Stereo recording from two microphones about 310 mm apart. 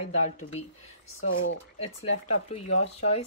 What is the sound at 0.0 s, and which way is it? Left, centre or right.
Speech, left.